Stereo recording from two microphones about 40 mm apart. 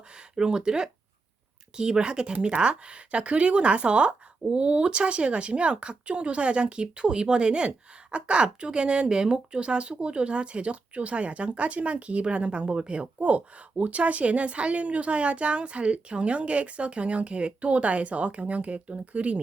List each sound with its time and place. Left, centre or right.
0.3 s a woman's voice: right